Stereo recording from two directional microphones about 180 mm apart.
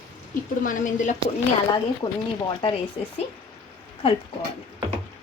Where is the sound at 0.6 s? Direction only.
45° left (ahead or behind).